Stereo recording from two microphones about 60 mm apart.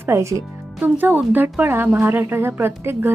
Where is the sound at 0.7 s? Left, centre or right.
Right.